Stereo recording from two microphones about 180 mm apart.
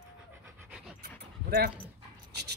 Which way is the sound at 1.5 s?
60° right (ahead or behind).